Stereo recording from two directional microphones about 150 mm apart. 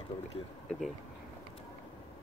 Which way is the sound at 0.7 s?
Centre (ahead or behind).